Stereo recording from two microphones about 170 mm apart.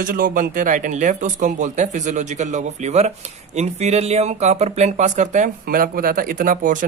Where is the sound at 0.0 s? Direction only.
55° right (ahead or behind).